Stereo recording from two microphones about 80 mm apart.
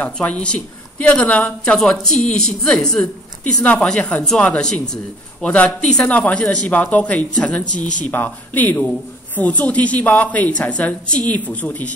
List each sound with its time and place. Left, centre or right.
0.0 s a woman's voice: centre